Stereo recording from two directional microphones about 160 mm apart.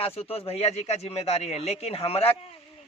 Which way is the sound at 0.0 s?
40° left (ahead or behind).